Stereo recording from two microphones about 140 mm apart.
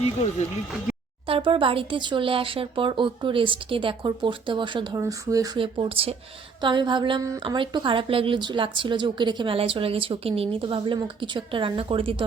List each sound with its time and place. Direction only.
1.3 s speech: 35° right (ahead or behind)
4.9 s speech: 25° right (ahead or behind)
5.5 s speech: 35° right (ahead or behind)